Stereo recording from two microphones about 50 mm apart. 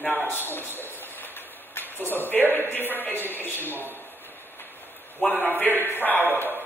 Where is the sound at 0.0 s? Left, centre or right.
Left.